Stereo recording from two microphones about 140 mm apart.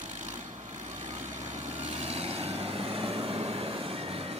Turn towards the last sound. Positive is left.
turn(degrees=-45)  # may be behind; listen again after turning